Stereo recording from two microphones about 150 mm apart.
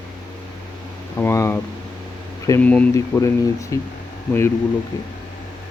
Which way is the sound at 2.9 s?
20° left (ahead or behind).